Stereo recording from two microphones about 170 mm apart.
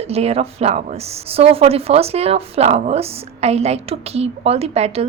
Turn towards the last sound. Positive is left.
turn(degrees=-40)  # may be behind; listen again after turning